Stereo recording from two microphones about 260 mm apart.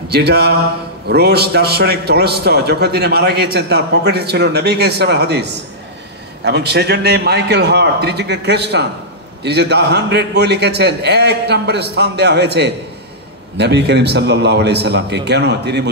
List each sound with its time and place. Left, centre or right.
0.1 s a man's voice: right